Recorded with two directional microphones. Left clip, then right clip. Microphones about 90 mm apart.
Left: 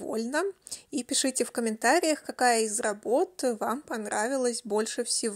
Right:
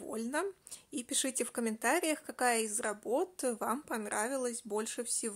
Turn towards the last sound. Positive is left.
turn(degrees=45)  # may be behind; listen again after turning